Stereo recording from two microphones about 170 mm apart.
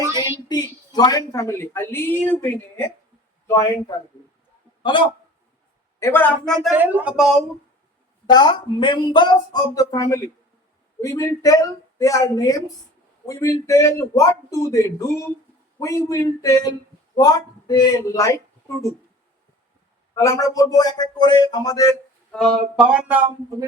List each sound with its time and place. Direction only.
0.1 s a woman's voice: 25° left (ahead or behind)
6.0 s a woman's voice: 15° left (ahead or behind)
6.7 s speech: 10° right (ahead or behind)
8.3 s a man's voice: 25° left (ahead or behind)
20.1 s a man's voice: 20° left (ahead or behind)
22.7 s speech: 5° right (ahead or behind)